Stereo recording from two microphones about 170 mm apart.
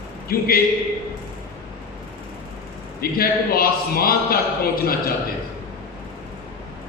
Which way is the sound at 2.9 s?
60° left (ahead or behind).